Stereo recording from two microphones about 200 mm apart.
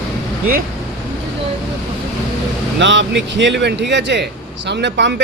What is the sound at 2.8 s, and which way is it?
Speech, 65° right (ahead or behind).